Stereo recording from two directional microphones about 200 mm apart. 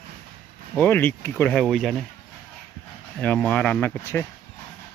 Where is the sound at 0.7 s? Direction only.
10° left (ahead or behind).